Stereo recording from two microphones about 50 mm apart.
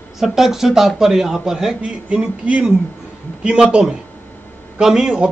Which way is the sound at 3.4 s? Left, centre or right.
Centre.